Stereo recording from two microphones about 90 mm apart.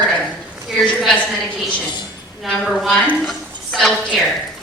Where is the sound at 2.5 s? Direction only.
Centre (ahead or behind).